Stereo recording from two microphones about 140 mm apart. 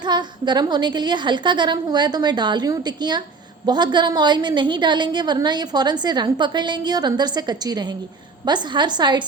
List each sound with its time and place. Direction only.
0.0 s a woman's voice: 30° right (ahead or behind)